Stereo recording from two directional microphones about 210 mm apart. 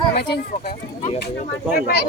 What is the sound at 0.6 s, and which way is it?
Speech, 35° left (ahead or behind).